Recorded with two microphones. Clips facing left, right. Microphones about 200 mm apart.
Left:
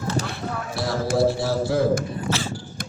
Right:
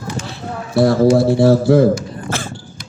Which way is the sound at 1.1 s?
60° right (ahead or behind).